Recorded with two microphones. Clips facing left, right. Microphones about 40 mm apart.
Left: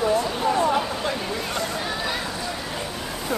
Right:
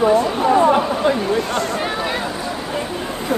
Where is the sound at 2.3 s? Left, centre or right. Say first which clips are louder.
Right 5 dB; right.